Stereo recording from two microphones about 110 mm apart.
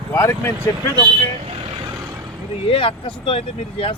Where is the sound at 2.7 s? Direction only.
55° left (ahead or behind).